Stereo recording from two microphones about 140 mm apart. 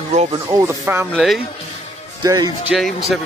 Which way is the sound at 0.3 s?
25° right (ahead or behind).